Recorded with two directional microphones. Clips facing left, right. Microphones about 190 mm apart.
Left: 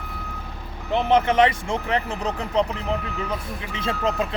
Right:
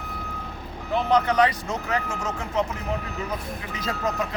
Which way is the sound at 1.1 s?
25° left (ahead or behind).